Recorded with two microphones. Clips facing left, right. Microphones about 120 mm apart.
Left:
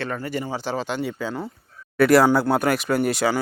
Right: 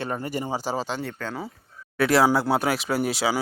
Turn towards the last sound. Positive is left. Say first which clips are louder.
# left 3 dB
turn(degrees=0)  # may be behind; listen again after turning